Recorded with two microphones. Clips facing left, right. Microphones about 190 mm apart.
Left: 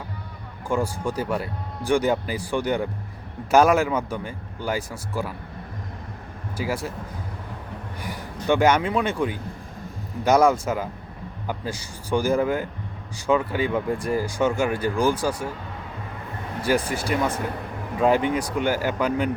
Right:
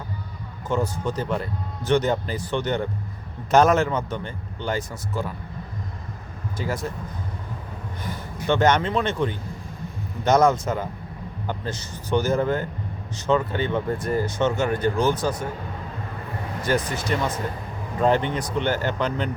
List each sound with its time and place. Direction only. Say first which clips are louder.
0.7 s speech: even; 10° left (ahead or behind)
6.6 s speech: left 1 dB; 5° left (ahead or behind)
8.4 s speech: left 1 dB; 10° left (ahead or behind)
16.6 s speech: left 1 dB; 10° left (ahead or behind)
17.2 s speech: left 1 dB; 60° left (ahead or behind)
18.0 s speech: left 1 dB; 5° left (ahead or behind)